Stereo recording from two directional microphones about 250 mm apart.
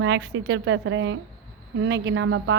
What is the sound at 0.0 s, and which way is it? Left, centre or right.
A woman's voice, right.